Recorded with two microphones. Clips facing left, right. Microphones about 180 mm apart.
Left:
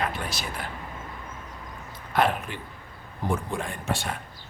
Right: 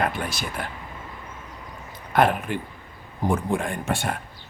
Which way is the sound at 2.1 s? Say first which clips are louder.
Right 4 dB; 55° right (ahead or behind).